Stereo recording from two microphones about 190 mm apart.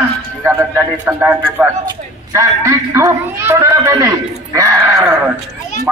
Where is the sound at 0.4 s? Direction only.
10° right (ahead or behind).